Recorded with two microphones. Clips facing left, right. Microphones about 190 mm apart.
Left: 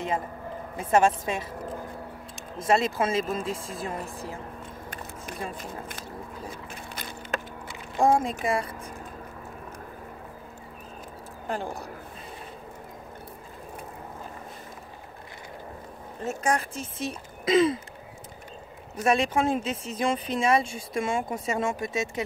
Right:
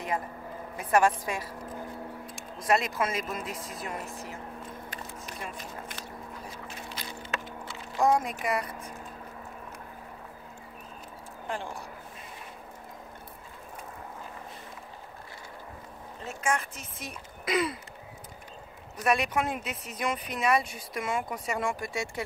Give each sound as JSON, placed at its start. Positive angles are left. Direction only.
{"t": 0.7, "sound": "speech", "side_deg": 25}
{"t": 7.0, "sound": "a sound", "side_deg": 50}
{"t": 8.0, "sound": "speech", "side_deg": 30}
{"t": 11.4, "sound": "speech", "side_deg": 40}
{"t": 16.3, "sound": "speech", "side_deg": 35}
{"t": 18.9, "sound": "speech", "side_deg": 25}